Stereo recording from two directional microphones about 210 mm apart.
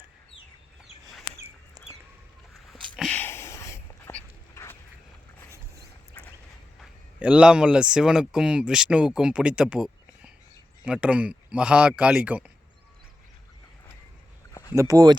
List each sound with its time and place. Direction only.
1.8 s bird: 20° right (ahead or behind)
2.9 s dog: 5° left (ahead or behind)
6.2 s vehicle: 5° left (ahead or behind)
6.7 s a man's voice: 5° right (ahead or behind)
14.5 s a sound: 15° left (ahead or behind)
14.8 s speech: 15° right (ahead or behind)